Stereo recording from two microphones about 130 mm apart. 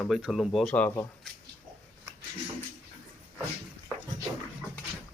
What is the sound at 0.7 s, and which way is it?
Speech, 10° left (ahead or behind).